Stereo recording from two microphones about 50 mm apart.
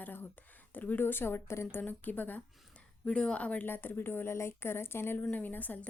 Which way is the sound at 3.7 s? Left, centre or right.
Left.